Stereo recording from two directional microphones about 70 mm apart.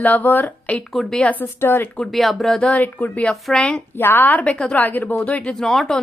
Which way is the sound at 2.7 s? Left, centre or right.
Left.